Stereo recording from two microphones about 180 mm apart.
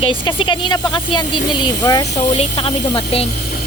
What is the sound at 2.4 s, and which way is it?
Speech, 30° left (ahead or behind).